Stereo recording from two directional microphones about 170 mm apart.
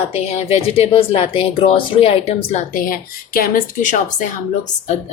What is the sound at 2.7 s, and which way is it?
A woman's voice, 55° left (ahead or behind).